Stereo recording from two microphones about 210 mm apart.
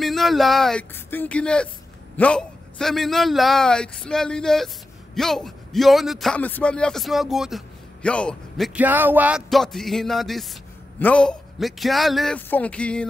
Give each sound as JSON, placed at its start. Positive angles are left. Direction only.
{"t": 0.0, "sound": "a man's voice", "side_deg": 0}